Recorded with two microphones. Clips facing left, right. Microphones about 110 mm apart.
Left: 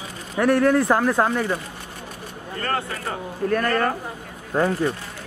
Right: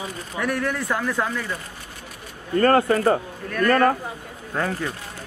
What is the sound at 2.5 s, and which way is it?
A man's voice, 45° right (ahead or behind).